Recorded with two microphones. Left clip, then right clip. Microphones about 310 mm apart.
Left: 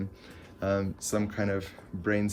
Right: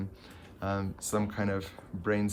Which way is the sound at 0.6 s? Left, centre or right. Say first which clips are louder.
Left 5 dB; centre.